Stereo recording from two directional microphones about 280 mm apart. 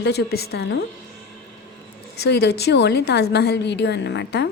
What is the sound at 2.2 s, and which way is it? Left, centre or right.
A woman's voice, left.